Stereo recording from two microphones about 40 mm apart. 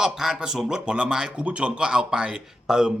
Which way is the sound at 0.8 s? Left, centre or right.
Right.